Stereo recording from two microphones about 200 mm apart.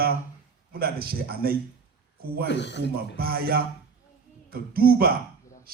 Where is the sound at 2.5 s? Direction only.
60° left (ahead or behind).